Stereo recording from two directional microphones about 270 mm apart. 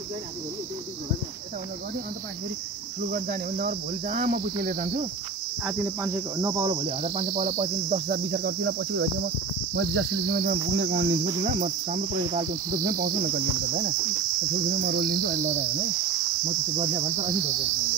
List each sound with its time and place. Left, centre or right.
3.1 s cricket: right
5.7 s cricket: centre; by 11.1 s right
11.2 s cricket: right